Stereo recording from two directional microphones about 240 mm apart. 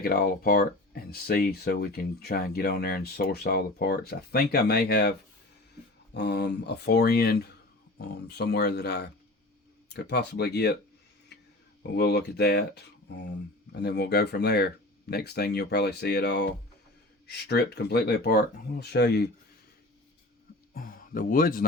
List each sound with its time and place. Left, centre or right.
0.0 s speech: left
6.1 s speech: left
11.8 s speech: left
20.7 s speech: left